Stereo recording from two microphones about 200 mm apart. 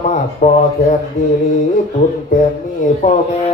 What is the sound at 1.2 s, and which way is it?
Mantra, 35° left (ahead or behind).